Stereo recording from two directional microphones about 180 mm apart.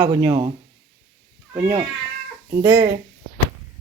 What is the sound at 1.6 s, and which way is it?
Speech, 10° right (ahead or behind).